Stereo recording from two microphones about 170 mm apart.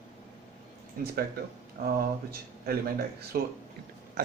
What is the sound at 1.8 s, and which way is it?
Speech, 65° right (ahead or behind).